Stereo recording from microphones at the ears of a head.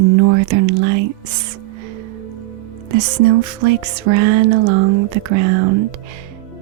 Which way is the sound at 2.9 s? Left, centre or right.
Right.